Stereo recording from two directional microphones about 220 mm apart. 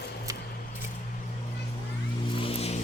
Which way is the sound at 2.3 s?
25° left (ahead or behind).